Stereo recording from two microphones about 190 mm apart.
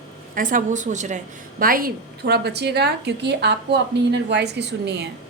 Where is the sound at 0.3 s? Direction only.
45° right (ahead or behind).